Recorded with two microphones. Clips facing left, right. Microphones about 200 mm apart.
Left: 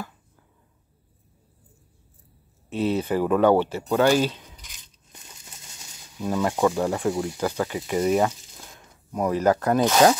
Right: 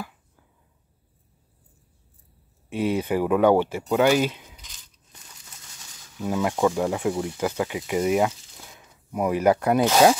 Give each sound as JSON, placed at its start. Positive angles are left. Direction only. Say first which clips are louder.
{"t": 2.7, "sound": "speech", "louder": "even", "side_deg": -10}
{"t": 4.8, "sound": "tearing", "louder": "left 3 dB", "side_deg": 25}
{"t": 6.2, "sound": "speech", "louder": "even", "side_deg": -10}